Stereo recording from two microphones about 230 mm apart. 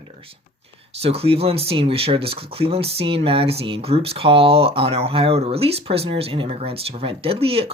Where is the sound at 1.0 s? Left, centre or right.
Right.